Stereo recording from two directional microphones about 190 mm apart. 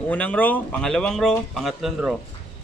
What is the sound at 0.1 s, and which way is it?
Speech, 10° left (ahead or behind).